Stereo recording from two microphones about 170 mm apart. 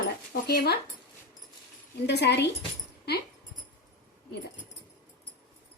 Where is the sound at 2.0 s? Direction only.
80° left.